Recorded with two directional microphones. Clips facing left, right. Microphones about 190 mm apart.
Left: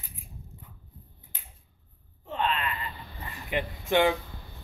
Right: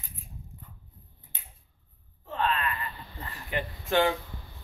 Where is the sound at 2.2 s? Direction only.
20° left (ahead or behind).